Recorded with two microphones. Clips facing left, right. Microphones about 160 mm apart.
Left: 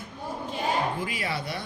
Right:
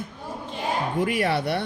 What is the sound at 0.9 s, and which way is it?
Speech, 60° right (ahead or behind).